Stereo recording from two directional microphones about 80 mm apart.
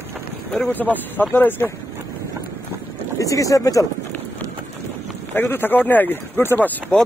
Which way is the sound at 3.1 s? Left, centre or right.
Left.